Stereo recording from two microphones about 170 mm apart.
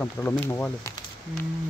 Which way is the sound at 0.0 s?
10° left (ahead or behind).